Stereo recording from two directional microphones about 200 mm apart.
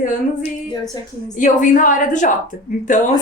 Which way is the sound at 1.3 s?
40° left (ahead or behind).